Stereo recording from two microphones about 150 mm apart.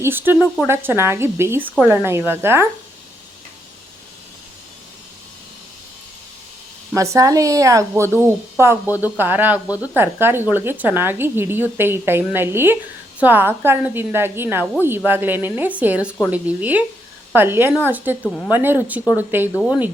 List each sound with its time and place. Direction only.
0.0 s a woman's voice: 15° right (ahead or behind)
0.3 s speech: 5° left (ahead or behind)
0.7 s a woman's voice: 15° right (ahead or behind)
6.9 s a woman's voice: 20° right (ahead or behind)